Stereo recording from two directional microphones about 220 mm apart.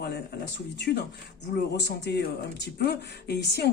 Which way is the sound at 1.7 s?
50° left (ahead or behind).